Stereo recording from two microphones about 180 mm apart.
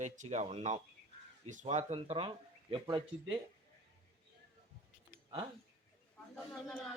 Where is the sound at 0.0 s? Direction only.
40° right (ahead or behind); by 3.3 s 25° right (ahead or behind).